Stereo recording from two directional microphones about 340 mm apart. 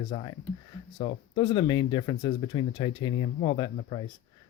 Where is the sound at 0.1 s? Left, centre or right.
Centre.